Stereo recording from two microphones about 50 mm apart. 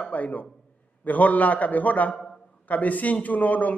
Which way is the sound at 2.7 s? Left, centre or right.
Left.